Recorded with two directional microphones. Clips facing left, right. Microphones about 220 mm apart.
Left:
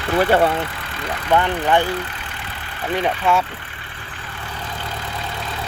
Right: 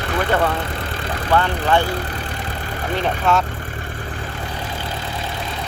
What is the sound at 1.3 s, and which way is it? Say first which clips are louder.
Speech: left 1 dB; 15° left (ahead or behind).